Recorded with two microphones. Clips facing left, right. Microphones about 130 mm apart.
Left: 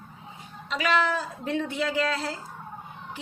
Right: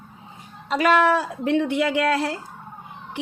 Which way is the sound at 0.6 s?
45° right (ahead or behind).